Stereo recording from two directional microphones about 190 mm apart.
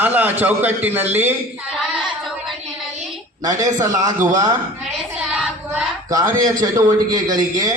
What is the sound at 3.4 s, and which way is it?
A man's voice, 20° right (ahead or behind).